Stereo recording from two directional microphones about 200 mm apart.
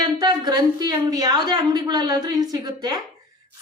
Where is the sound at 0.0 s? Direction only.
20° right (ahead or behind).